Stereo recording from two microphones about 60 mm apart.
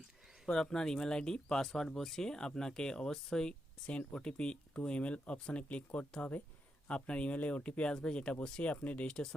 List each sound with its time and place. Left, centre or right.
0.4 s speech: centre